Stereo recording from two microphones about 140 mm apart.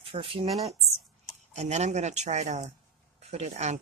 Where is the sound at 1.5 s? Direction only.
55° right (ahead or behind).